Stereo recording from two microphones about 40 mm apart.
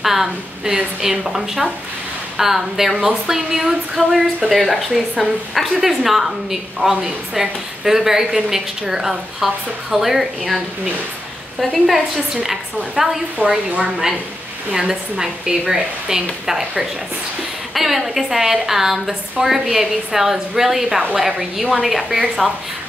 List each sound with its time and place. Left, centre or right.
0.0 s speech: centre
11.6 s a woman's voice: centre
13.4 s a woman's voice: right
14.7 s speech: centre
17.7 s a woman's voice: centre